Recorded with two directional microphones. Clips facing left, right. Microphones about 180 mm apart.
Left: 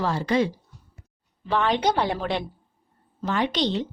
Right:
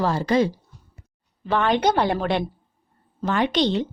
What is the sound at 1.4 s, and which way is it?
A woman's voice, 55° right (ahead or behind).